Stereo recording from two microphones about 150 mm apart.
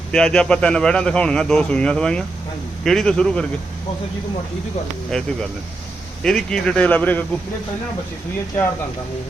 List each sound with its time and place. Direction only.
0.1 s a man's voice: 5° left (ahead or behind)
5.1 s a man's voice: 5° left (ahead or behind)